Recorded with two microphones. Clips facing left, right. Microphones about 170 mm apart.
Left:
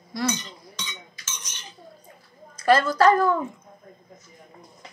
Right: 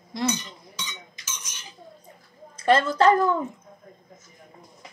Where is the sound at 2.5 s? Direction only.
25° right (ahead or behind).